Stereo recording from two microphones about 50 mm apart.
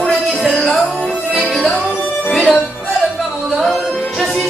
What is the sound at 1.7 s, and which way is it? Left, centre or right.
Music, left.